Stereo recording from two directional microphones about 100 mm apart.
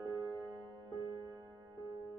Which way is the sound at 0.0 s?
40° right (ahead or behind).